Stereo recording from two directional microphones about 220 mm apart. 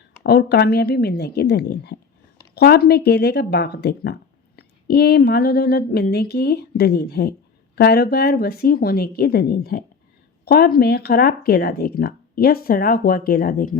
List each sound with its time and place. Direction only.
0.2 s speech: 45° left (ahead or behind)